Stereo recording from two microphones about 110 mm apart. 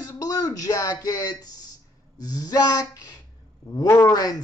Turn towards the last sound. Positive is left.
turn(degrees=35)  # may be behind; listen again after turning